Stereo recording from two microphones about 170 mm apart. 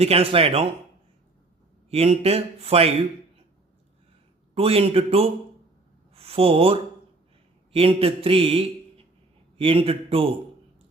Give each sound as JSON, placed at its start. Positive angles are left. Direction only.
{"t": 0.0, "sound": "speech", "side_deg": -35}
{"t": 1.9, "sound": "speech", "side_deg": -35}
{"t": 4.5, "sound": "a man's voice", "side_deg": -35}